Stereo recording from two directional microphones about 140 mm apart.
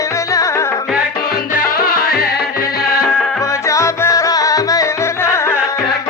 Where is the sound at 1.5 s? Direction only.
90° left.